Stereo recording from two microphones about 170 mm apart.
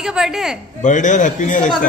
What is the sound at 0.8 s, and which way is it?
Speech, 45° left (ahead or behind).